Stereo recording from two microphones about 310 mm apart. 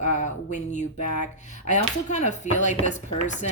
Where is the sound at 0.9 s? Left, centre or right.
Left.